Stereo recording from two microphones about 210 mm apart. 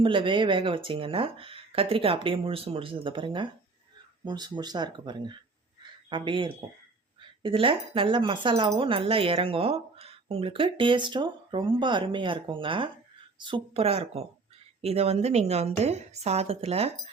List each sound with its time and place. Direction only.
0.0 s speech: 25° right (ahead or behind)